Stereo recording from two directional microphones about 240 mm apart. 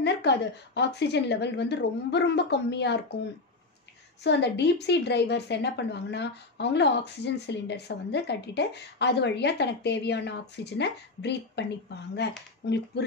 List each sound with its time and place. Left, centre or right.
0.0 s a woman's voice: left
4.2 s a woman's voice: left